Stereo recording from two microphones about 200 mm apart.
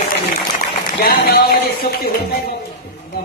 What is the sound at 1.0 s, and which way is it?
Speech, 50° left (ahead or behind).